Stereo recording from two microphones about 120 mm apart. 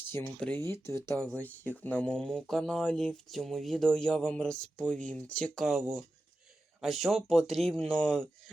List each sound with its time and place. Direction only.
0.3 s speech: 10° left (ahead or behind)
0.6 s speech: 25° left (ahead or behind)
1.2 s speech: 15° left (ahead or behind)